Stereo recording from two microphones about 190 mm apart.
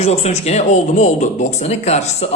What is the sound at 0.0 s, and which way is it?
A man's voice, 35° left (ahead or behind).